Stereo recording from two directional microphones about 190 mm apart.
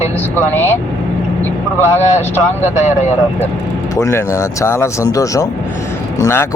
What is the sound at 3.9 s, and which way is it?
Speech, 15° left (ahead or behind).